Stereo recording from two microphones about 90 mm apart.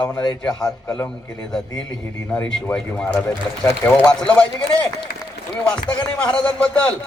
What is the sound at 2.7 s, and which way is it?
A man's voice, 15° left (ahead or behind).